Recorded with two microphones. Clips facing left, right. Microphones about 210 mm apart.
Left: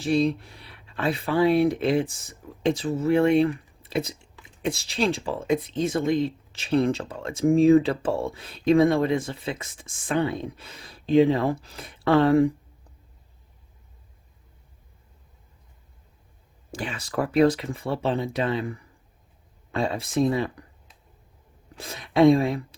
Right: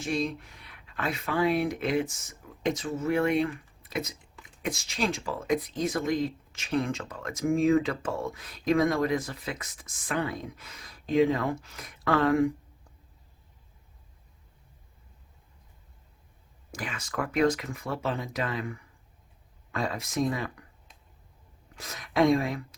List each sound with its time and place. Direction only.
0.0 s speech: 30° left (ahead or behind)
16.7 s speech: 30° left (ahead or behind)
21.8 s speech: 30° left (ahead or behind)